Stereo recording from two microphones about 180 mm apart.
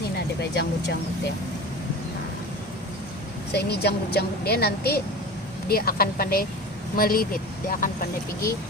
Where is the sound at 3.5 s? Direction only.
65° left (ahead or behind).